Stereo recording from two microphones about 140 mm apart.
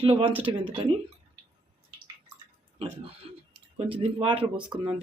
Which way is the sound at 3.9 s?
40° right (ahead or behind).